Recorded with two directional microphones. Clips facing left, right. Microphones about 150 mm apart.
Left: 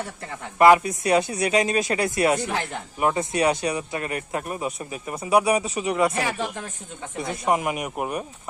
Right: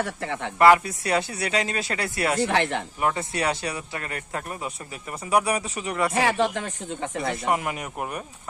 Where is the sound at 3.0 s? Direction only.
20° left (ahead or behind).